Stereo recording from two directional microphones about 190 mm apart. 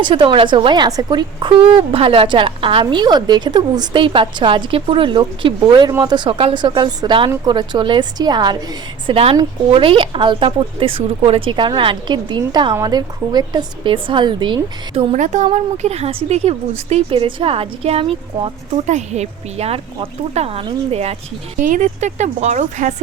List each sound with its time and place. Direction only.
0.0 s a woman's voice: 25° right (ahead or behind)
15.1 s a woman's voice: 40° right (ahead or behind)